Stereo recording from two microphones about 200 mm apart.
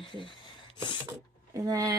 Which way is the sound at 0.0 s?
25° left (ahead or behind).